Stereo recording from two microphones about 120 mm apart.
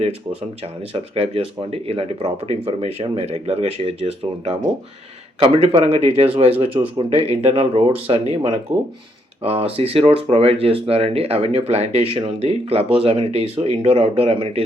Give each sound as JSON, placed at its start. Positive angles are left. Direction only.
{"t": 0.6, "sound": "speech", "side_deg": -55}
{"t": 9.4, "sound": "speech", "side_deg": -55}